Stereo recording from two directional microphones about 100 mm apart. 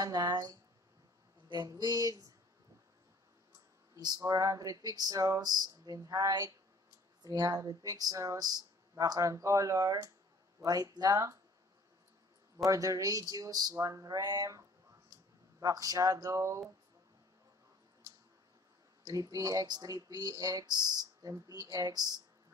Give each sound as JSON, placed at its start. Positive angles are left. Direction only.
{"t": 0.0, "sound": "speech", "side_deg": -40}
{"t": 3.9, "sound": "speech", "side_deg": -40}
{"t": 12.6, "sound": "speech", "side_deg": -35}
{"t": 19.0, "sound": "speech", "side_deg": -40}